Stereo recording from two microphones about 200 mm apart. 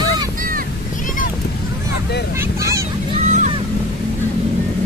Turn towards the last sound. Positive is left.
turn(degrees=-35)  # may be behind; listen again after turning